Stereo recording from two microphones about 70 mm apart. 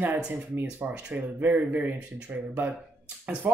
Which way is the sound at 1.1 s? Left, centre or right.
Right.